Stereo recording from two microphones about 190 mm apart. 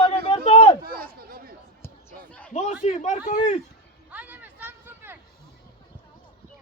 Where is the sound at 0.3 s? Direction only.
30° left (ahead or behind).